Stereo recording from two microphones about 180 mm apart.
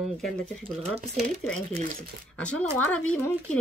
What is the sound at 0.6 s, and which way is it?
Speech, 35° right (ahead or behind).